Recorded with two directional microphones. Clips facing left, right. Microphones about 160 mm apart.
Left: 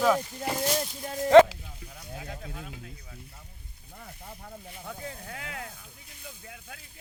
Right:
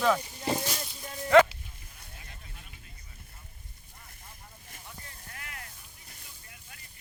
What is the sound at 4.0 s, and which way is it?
Snake, 65° left (ahead or behind).